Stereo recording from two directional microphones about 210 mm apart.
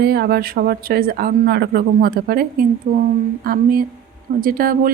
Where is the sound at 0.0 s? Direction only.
45° right (ahead or behind).